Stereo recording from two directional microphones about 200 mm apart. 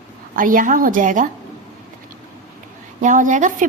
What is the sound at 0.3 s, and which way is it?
Speech, 40° right (ahead or behind).